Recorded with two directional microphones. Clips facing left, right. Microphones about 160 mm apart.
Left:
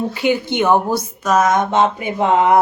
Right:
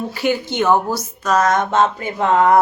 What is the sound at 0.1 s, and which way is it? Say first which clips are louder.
Speech: left 2 dB; 20° left (ahead or behind).